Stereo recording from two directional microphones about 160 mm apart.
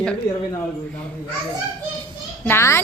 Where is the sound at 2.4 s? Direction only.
15° left (ahead or behind).